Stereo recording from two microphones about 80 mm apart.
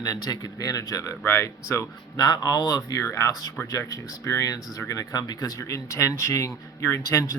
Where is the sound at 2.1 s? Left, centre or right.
Left.